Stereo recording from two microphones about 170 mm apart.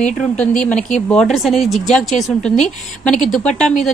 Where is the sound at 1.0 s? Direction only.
5° left (ahead or behind).